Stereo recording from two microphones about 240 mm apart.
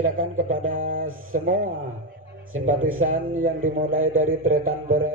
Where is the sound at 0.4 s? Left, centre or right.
Right.